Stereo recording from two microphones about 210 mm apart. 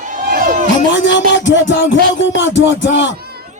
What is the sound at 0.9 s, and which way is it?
Speech, 60° left (ahead or behind).